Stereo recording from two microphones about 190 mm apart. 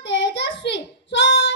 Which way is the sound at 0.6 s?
70° left (ahead or behind).